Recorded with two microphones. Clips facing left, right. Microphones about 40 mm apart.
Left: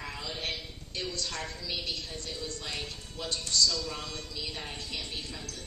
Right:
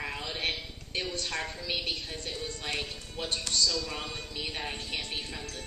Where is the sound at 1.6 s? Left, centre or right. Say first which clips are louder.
Right 2 dB; right.